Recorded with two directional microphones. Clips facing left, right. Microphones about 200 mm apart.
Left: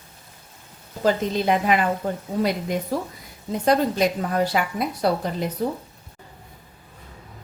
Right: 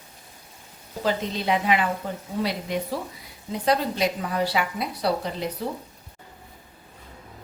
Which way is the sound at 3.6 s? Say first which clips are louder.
Left 4 dB; 50° left (ahead or behind).